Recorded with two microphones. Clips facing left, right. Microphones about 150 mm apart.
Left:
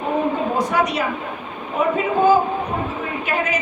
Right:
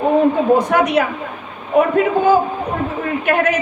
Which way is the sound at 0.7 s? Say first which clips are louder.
Right 5 dB; 60° right (ahead or behind).